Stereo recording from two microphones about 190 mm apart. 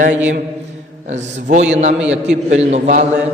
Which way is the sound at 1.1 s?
35° right (ahead or behind).